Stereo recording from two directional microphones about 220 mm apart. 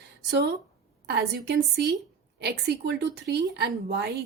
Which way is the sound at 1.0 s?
50° right (ahead or behind).